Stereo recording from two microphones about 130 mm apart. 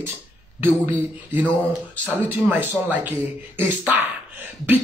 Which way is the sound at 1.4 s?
10° left (ahead or behind).